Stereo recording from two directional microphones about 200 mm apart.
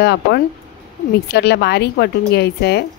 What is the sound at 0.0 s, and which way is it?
A woman's voice, 55° left (ahead or behind).